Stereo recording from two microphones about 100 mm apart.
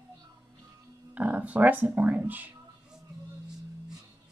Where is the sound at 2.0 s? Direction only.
15° right (ahead or behind).